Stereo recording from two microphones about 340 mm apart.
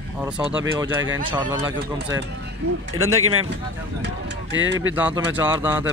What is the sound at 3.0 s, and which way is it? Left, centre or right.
Speech, right.